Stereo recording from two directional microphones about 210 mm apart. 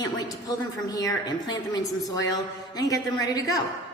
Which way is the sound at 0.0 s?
20° left (ahead or behind).